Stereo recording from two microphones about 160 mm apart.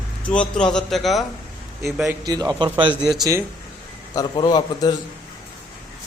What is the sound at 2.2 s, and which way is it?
Speech, 25° right (ahead or behind).